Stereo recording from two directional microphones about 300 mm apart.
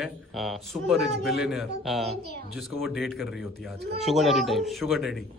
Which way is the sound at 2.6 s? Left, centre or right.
Centre.